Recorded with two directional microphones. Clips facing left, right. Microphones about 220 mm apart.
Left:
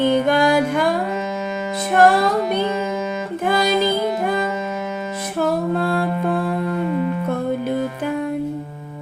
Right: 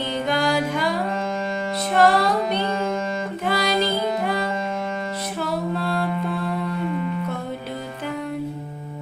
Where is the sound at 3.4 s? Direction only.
50° left (ahead or behind).